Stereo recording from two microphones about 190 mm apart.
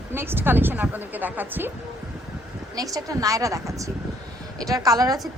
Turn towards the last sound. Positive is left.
turn(degrees=-20)  # may be behind; listen again after turning